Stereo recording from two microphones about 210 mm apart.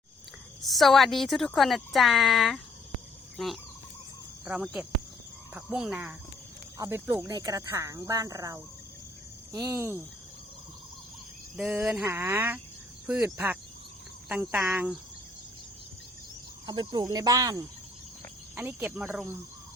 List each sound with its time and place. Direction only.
0.6 s speech: centre (ahead or behind)
3.3 s fowl: centre (ahead or behind)
4.4 s speech: 5° right (ahead or behind)
6.7 s speech: 15° right (ahead or behind)
11.5 s speech: 5° right (ahead or behind)
16.6 s speech: 20° right (ahead or behind)